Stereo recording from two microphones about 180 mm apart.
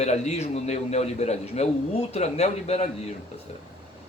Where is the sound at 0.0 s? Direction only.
40° left (ahead or behind).